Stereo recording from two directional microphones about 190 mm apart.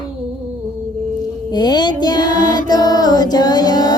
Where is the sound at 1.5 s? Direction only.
20° left (ahead or behind).